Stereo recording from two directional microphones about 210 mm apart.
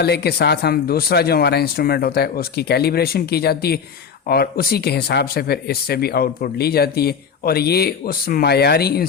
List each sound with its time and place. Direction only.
0.0 s speech: 50° left (ahead or behind)